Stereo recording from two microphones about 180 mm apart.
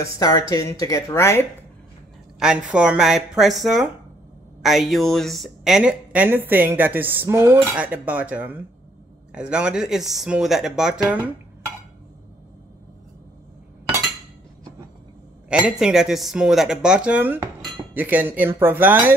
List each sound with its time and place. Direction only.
0.0 s speech: 20° left (ahead or behind)
2.3 s a woman's voice: 5° right (ahead or behind)
15.8 s a woman's voice: 5° right (ahead or behind)